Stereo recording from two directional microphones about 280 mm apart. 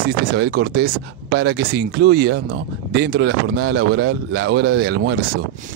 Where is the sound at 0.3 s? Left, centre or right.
Right.